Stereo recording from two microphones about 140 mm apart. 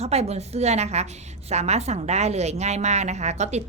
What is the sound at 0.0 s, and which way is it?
A woman's voice, 50° right (ahead or behind).